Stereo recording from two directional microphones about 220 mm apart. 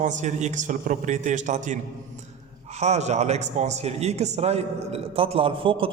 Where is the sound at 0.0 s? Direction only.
35° right (ahead or behind).